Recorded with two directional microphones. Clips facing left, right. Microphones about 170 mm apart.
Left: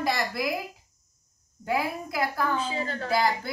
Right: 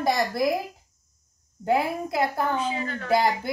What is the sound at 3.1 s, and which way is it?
Speech, 20° right (ahead or behind).